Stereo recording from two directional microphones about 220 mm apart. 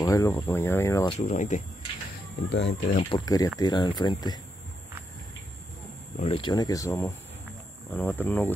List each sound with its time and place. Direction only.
0.0 s speech: 15° left (ahead or behind)
1.1 s speech: 35° left (ahead or behind)
2.5 s speech: 50° left (ahead or behind)
3.0 s speech: 20° left (ahead or behind)
6.1 s speech: 25° left (ahead or behind); by 8.5 s 10° left (ahead or behind)